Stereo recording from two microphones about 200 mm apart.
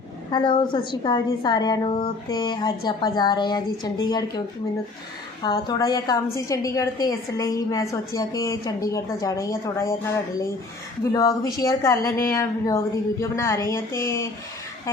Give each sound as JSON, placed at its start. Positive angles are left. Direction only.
{"t": 0.3, "sound": "a woman's voice", "side_deg": 20}
{"t": 5.4, "sound": "a woman's voice", "side_deg": 20}
{"t": 11.0, "sound": "a woman's voice", "side_deg": 15}